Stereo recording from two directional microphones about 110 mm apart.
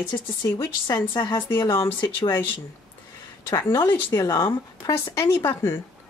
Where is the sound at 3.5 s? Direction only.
25° left (ahead or behind).